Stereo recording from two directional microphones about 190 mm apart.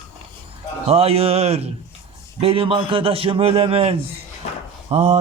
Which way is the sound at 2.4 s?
30° right (ahead or behind).